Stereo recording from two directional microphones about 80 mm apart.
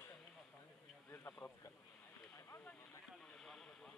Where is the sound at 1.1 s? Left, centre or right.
Left.